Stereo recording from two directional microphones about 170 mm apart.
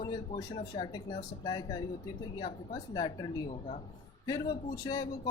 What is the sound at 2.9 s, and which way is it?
A man's voice, 25° left (ahead or behind).